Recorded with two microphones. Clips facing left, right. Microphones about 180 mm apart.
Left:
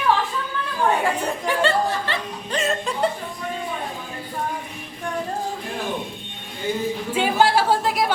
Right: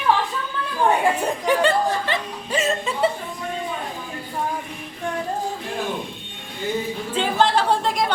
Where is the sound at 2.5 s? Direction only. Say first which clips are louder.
Right 1 dB; centre (ahead or behind).